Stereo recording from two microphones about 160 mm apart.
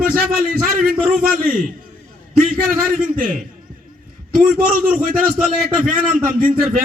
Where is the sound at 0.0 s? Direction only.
65° right (ahead or behind).